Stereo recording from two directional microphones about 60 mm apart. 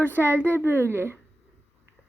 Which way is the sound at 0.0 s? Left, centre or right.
Right.